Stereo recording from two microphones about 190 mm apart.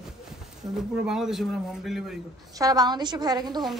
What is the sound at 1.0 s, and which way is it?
Speech, centre (ahead or behind).